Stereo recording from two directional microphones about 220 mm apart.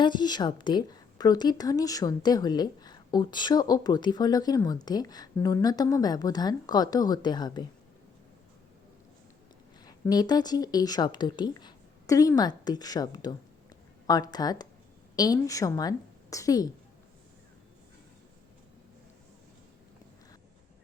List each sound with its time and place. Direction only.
0.0 s a woman's voice: 20° left (ahead or behind)
9.8 s a woman's voice: 15° left (ahead or behind)